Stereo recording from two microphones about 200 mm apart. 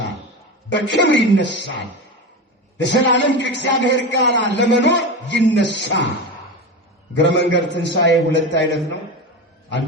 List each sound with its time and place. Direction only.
0.7 s a man's voice: 60° left (ahead or behind)
2.7 s a man's voice: 65° left (ahead or behind)
7.2 s a man's voice: 60° left (ahead or behind)